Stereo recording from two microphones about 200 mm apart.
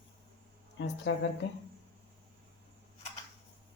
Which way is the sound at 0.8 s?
70° left (ahead or behind).